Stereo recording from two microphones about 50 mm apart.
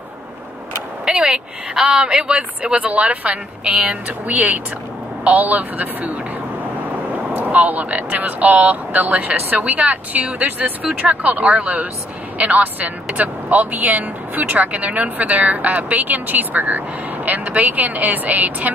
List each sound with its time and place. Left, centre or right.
1.0 s a woman's voice: centre
7.3 s a woman's voice: right